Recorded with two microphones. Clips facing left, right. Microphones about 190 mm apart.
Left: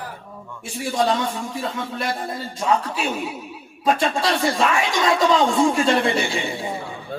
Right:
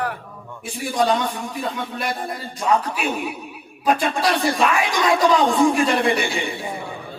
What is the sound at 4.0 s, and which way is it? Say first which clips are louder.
A man's voice: even; 25° left (ahead or behind).